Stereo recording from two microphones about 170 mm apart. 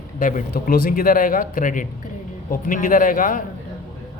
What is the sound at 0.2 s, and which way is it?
Speech, 50° left (ahead or behind).